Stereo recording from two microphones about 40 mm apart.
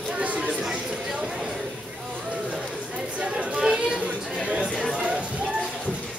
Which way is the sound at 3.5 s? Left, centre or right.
Centre.